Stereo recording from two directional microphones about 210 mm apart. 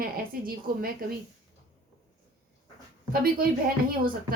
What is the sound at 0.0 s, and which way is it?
Speech, 45° right (ahead or behind).